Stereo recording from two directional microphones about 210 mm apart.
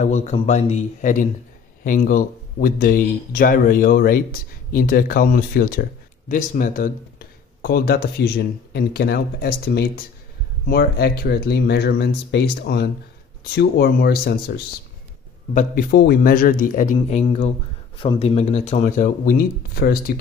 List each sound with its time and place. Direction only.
0.0 s speech: 30° left (ahead or behind)
15.5 s speech: 45° left (ahead or behind)